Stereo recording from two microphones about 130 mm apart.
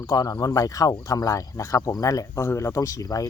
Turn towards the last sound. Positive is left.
turn(degrees=25)  # may be behind; listen again after turning